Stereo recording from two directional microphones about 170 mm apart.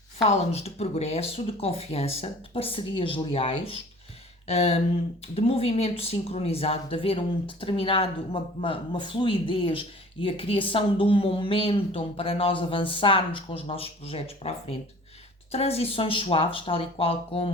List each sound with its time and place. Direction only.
0.2 s speech: 35° left (ahead or behind)